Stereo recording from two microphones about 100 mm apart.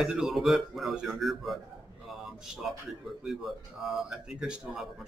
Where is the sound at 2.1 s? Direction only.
Centre (ahead or behind).